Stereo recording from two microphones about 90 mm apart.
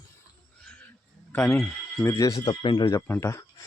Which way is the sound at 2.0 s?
35° left (ahead or behind).